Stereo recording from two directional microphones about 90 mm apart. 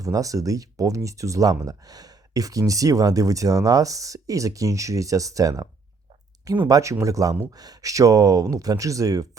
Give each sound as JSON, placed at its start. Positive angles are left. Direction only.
{"t": 0.0, "sound": "speech", "side_deg": -40}